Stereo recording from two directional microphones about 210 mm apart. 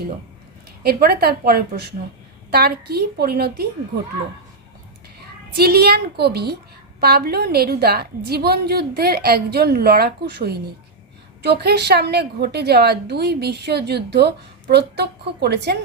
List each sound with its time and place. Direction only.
0.8 s a woman's voice: 45° right (ahead or behind)
5.5 s a woman's voice: 50° right (ahead or behind)